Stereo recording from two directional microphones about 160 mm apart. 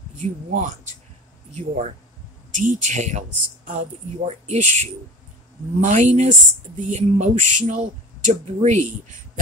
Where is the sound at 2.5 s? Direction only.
50° right (ahead or behind).